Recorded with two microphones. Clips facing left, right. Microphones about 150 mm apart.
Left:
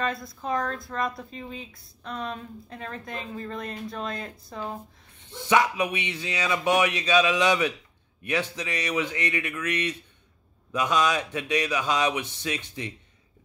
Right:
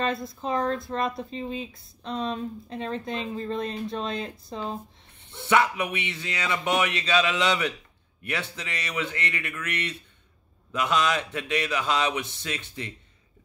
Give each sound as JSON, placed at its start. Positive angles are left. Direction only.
{"t": 0.0, "sound": "speech", "side_deg": -25}
{"t": 5.5, "sound": "speech", "side_deg": 15}